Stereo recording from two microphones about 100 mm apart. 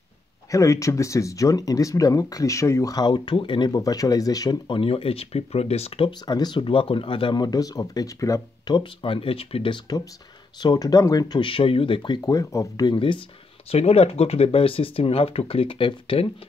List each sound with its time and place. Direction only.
0.5 s speech: 35° left (ahead or behind)
4.6 s speech: 65° left (ahead or behind); by 6.0 s 85° left
6.0 s speech: 45° left (ahead or behind)
8.7 s speech: 65° left (ahead or behind)
10.6 s speech: 40° left (ahead or behind)
11.4 s speech: 60° left (ahead or behind)
12.3 s speech: 35° left (ahead or behind); by 13.2 s 55° left (ahead or behind)
13.7 s speech: 90° left; by 16.3 s 60° left (ahead or behind)